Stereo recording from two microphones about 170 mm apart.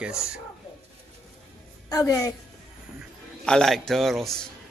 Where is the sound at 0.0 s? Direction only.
5° right (ahead or behind).